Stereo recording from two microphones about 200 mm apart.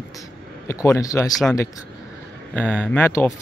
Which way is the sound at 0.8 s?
15° left (ahead or behind).